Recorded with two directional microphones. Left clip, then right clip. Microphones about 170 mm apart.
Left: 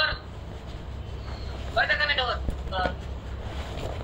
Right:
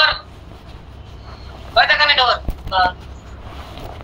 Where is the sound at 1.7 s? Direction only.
50° right (ahead or behind).